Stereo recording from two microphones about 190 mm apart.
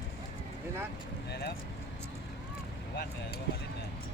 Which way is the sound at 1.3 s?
60° left (ahead or behind).